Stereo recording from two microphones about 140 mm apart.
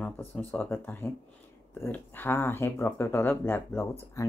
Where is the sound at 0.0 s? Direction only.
15° left (ahead or behind).